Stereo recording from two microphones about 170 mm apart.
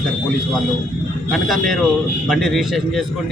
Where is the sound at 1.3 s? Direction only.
Centre (ahead or behind).